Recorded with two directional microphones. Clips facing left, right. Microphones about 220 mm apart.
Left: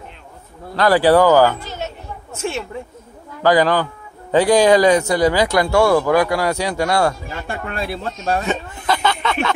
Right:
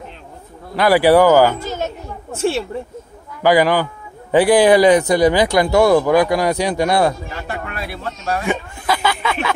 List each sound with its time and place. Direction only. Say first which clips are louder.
0.7 s a man's voice: right 1 dB; 10° right (ahead or behind)
1.6 s a sound: right 5 dB; 45° right (ahead or behind)
2.3 s speech: right 6 dB; 35° right (ahead or behind)
3.4 s a man's voice: right 1 dB; 10° right (ahead or behind)
7.4 s speech: left 4 dB; 25° left (ahead or behind)
8.5 s a sound: right 1 dB; 10° right (ahead or behind)